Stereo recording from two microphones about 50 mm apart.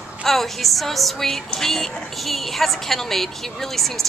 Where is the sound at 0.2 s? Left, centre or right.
Centre.